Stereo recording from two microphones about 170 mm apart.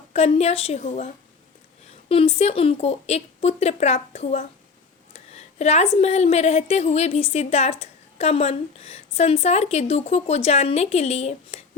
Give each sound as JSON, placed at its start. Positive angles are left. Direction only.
{"t": 0.1, "sound": "a woman's voice", "side_deg": 40}